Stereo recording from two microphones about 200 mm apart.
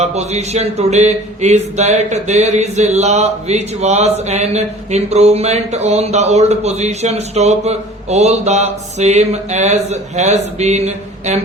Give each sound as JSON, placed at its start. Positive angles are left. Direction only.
{"t": 0.0, "sound": "speech", "side_deg": -35}